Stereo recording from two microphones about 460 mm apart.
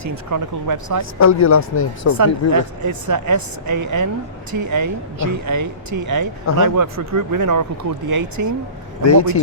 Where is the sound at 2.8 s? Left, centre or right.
Right.